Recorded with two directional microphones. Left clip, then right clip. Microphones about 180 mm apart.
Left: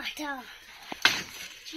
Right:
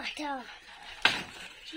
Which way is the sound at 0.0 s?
15° right (ahead or behind).